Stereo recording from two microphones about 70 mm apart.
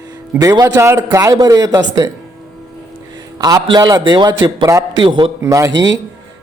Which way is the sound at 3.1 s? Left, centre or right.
Right.